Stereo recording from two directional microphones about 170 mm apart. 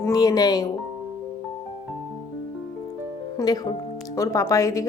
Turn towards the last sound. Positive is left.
turn(degrees=20)  # may be behind; listen again after turning